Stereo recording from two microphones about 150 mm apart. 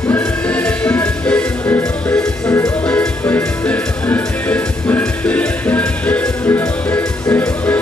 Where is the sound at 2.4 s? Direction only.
25° left (ahead or behind).